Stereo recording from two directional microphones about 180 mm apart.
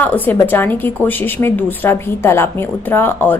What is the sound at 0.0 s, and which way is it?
Speech, 10° left (ahead or behind).